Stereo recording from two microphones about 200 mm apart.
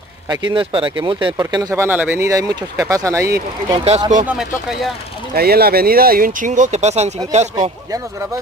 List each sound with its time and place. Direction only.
0.6 s speech: 25° right (ahead or behind)
3.7 s speech: 30° right (ahead or behind)
4.3 s speech: centre (ahead or behind)
5.3 s speech: 50° right (ahead or behind); by 7.7 s 35° right (ahead or behind)